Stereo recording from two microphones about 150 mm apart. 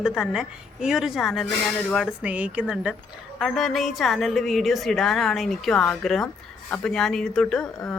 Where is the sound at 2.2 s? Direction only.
10° right (ahead or behind).